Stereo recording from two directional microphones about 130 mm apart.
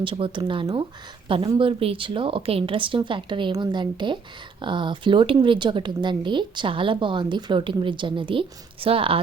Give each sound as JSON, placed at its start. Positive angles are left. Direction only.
{"t": 0.0, "sound": "speech", "side_deg": -40}